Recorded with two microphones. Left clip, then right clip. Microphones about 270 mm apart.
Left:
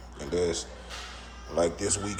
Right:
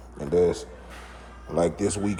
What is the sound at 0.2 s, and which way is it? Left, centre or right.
Speech, centre.